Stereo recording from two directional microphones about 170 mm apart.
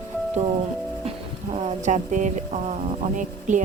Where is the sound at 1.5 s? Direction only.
40° right (ahead or behind).